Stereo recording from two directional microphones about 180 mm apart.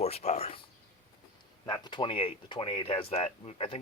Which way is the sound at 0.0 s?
35° left (ahead or behind).